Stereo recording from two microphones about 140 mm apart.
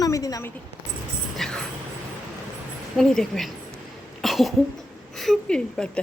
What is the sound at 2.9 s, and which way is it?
Speech, 5° left (ahead or behind).